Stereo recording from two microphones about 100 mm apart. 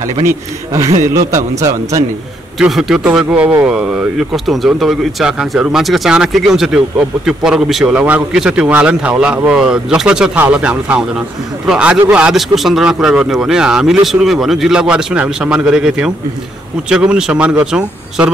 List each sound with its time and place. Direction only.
0.2 s a man's voice: 30° right (ahead or behind)
2.6 s speech: 5° right (ahead or behind)
7.9 s speech: 15° right (ahead or behind)